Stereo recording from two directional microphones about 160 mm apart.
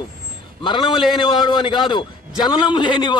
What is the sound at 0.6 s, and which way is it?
A man's voice, 30° left (ahead or behind).